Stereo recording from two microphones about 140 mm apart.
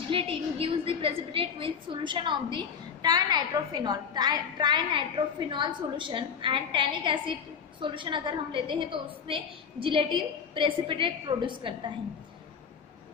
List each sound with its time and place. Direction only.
0.1 s a woman's voice: 40° right (ahead or behind)